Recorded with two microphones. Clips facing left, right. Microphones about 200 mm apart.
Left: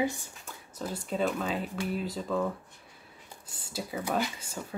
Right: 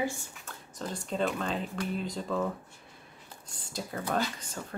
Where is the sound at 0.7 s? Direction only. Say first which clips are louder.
Left 1 dB; 5° left (ahead or behind).